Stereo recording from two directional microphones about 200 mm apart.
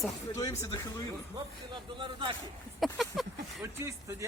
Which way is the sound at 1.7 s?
25° right (ahead or behind).